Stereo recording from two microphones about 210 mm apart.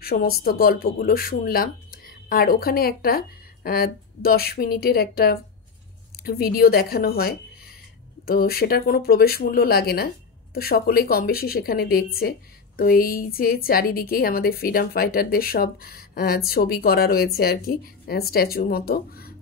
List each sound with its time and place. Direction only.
0.0 s speech: 45° left (ahead or behind)